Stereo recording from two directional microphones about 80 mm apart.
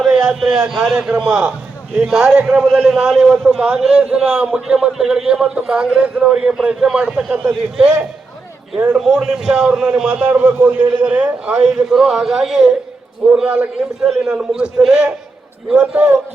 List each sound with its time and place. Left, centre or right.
0.0 s a man's voice: centre
10.2 s a man's voice: right